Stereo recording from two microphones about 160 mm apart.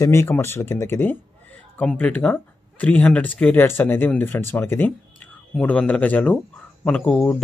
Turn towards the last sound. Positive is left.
turn(degrees=10)  # may be behind; listen again after turning